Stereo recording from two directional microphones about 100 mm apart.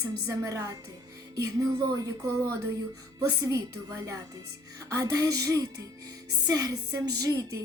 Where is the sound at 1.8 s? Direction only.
35° right (ahead or behind).